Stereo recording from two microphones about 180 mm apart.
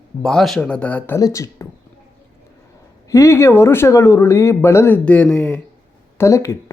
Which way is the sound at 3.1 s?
15° left (ahead or behind).